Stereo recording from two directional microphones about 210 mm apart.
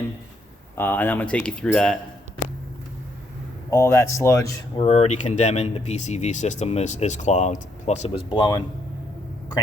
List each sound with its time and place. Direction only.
0.8 s speech: 10° left (ahead or behind)
3.7 s speech: 15° left (ahead or behind)
4.9 s speech: 30° left (ahead or behind)